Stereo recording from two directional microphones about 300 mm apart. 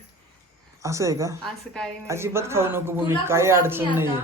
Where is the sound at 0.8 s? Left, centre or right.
Centre.